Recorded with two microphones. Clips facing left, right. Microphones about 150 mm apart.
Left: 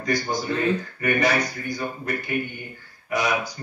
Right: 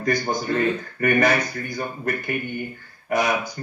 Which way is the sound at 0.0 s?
50° right (ahead or behind).